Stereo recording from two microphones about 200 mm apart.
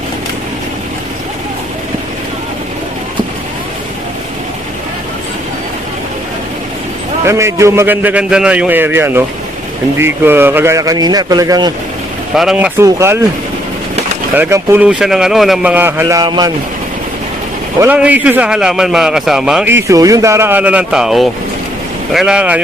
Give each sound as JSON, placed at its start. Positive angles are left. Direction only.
{"t": 7.3, "sound": "a man's voice", "side_deg": -15}
{"t": 12.3, "sound": "a man's voice", "side_deg": 0}
{"t": 14.3, "sound": "a man's voice", "side_deg": -10}
{"t": 17.7, "sound": "a man's voice", "side_deg": -10}